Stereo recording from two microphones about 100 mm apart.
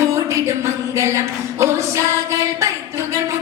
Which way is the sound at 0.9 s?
30° right (ahead or behind).